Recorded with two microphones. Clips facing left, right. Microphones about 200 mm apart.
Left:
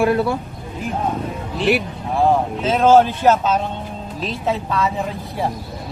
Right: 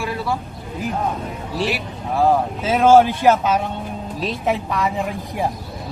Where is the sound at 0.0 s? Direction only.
55° left (ahead or behind).